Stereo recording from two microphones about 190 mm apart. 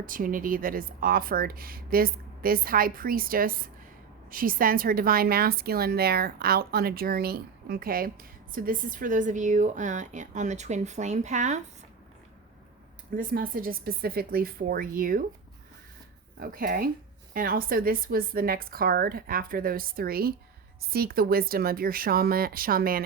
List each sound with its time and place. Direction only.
0.0 s a woman's voice: 45° right (ahead or behind)
13.1 s a woman's voice: 50° right (ahead or behind)
16.4 s a woman's voice: 50° right (ahead or behind)